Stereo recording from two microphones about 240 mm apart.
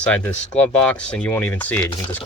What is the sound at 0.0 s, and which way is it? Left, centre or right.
Speech, centre.